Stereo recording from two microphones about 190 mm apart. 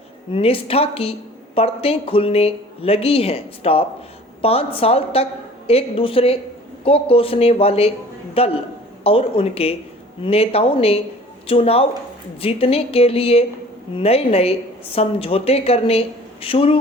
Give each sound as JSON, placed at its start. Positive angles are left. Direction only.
{"t": 0.3, "sound": "a woman's voice", "side_deg": 30}